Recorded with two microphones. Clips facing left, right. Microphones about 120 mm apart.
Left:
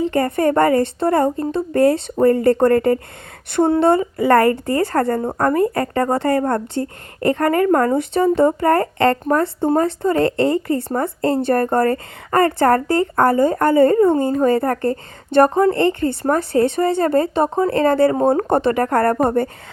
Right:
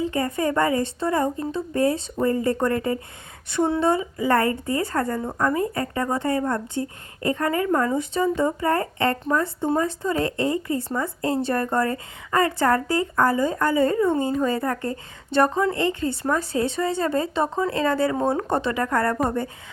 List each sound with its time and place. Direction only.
0.0 s a woman's voice: 65° left (ahead or behind)
3.5 s speech: 50° left (ahead or behind)
3.8 s a woman's voice: 65° left (ahead or behind)
5.4 s a woman's voice: 60° left (ahead or behind)